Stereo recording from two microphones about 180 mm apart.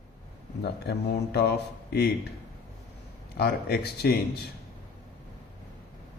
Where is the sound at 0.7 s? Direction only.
60° left (ahead or behind).